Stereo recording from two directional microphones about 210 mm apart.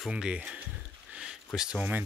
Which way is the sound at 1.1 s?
5° right (ahead or behind).